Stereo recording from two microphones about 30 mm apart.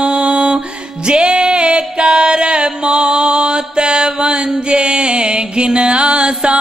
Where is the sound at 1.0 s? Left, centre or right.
Right.